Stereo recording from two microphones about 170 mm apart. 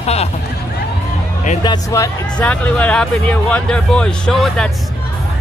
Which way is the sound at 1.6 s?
20° left (ahead or behind).